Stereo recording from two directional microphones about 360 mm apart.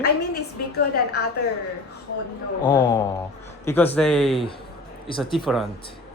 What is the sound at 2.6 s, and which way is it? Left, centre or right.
Speech, centre.